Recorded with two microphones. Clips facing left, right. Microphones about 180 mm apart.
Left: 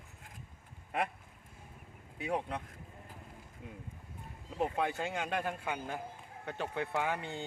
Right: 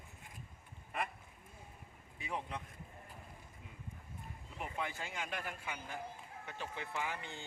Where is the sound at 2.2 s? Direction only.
65° left (ahead or behind).